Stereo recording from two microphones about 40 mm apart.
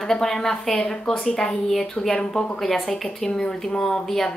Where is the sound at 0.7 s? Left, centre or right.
Left.